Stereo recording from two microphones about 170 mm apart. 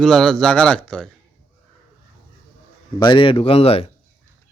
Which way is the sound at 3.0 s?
30° left (ahead or behind).